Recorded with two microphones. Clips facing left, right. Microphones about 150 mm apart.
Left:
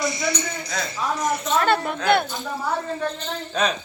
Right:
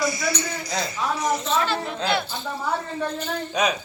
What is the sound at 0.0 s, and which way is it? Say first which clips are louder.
Music: even; 25° left (ahead or behind).